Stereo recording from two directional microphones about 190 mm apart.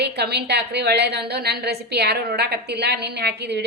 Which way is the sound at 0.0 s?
60° right (ahead or behind).